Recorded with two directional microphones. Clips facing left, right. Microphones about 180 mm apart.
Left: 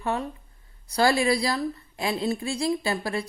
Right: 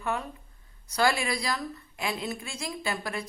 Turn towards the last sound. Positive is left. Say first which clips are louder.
# left 6 dB
turn(degrees=35)  # may be behind; listen again after turning